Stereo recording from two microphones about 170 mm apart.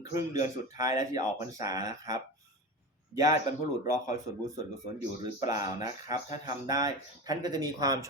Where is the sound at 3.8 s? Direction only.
20° right (ahead or behind).